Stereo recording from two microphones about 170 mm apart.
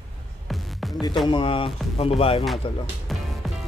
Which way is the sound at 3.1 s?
Centre (ahead or behind).